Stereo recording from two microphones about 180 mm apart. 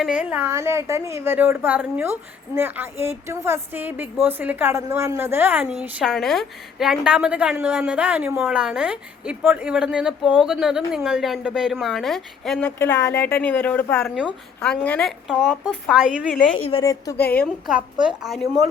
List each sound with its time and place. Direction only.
0.0 s a woman's voice: 5° right (ahead or behind)
16.8 s a woman's voice: 20° left (ahead or behind)
17.2 s a woman's voice: 60° left (ahead or behind)
18.0 s a woman's voice: centre (ahead or behind)